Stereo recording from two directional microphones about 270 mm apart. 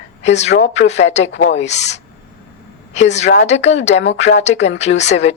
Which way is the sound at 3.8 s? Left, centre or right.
Left.